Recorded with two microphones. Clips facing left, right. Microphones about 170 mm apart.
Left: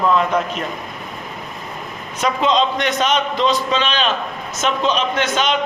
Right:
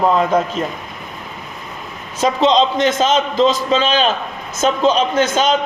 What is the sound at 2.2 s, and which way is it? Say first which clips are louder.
Speech: right 3 dB; 30° right (ahead or behind).